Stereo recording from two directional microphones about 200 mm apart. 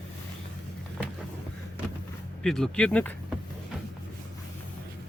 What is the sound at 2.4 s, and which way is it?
Speech, 5° left (ahead or behind).